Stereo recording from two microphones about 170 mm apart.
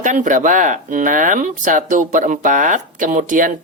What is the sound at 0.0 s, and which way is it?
Speech, 45° right (ahead or behind).